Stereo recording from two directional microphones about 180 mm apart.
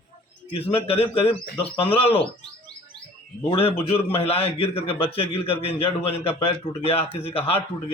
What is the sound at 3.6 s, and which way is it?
A man's voice, 30° left (ahead or behind).